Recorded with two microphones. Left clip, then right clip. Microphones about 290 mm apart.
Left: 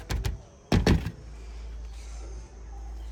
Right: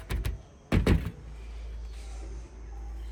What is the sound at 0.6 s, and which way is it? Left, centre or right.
Door, left.